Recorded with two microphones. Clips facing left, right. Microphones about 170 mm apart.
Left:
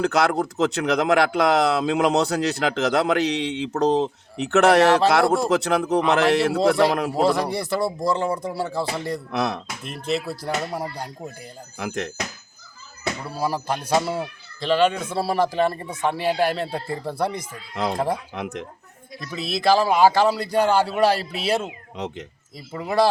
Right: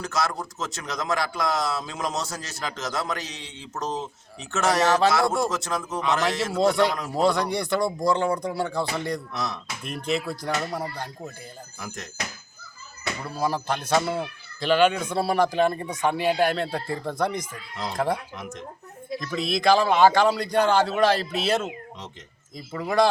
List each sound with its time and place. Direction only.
0.0 s speech: 65° left (ahead or behind)
7.1 s speech: 5° left (ahead or behind)
9.3 s speech: 65° left (ahead or behind)
9.8 s speech: centre (ahead or behind)
11.8 s speech: 65° left (ahead or behind)
13.2 s speech: 10° left (ahead or behind)
18.3 s speech: 65° left (ahead or behind)
19.2 s speech: 5° left (ahead or behind)